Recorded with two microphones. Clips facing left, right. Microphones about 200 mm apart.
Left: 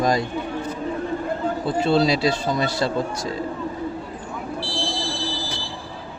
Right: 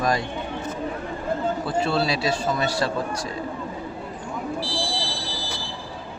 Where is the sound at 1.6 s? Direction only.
25° left (ahead or behind).